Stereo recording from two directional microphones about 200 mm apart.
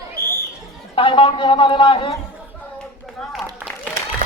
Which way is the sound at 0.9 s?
25° left (ahead or behind).